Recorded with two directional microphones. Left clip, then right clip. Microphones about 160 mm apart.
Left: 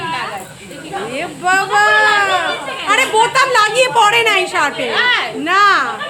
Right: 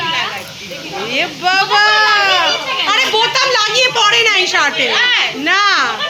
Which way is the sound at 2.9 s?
10° left (ahead or behind).